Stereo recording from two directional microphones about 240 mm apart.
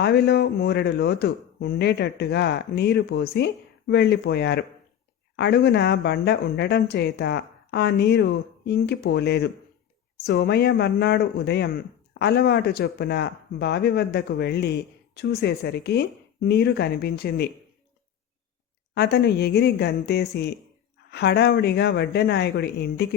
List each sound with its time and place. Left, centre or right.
0.0 s speech: left
18.9 s speech: left